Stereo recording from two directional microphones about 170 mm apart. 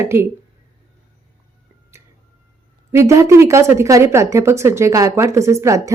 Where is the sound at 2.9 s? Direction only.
15° right (ahead or behind).